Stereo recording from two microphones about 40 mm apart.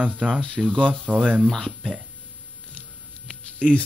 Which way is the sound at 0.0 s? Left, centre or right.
Right.